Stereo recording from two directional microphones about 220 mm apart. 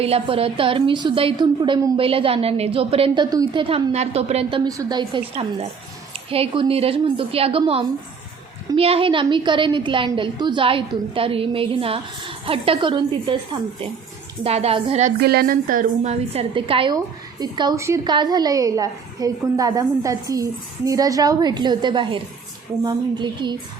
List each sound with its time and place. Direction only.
0.0 s a woman's voice: 25° right (ahead or behind)
15.2 s a woman's voice: 45° right (ahead or behind); by 23.6 s 20° right (ahead or behind)